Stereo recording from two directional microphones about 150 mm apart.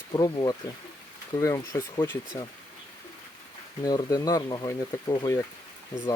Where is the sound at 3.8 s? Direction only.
25° left (ahead or behind).